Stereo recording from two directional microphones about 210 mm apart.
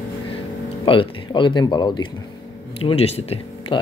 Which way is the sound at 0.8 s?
25° left (ahead or behind).